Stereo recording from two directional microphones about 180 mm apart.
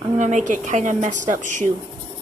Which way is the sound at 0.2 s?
45° right (ahead or behind).